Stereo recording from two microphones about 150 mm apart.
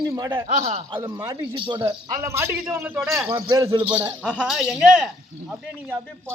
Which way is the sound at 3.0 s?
Centre (ahead or behind).